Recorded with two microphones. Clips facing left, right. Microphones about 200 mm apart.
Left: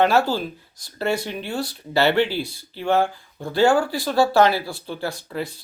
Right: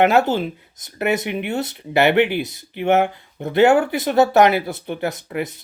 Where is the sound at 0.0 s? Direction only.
20° right (ahead or behind).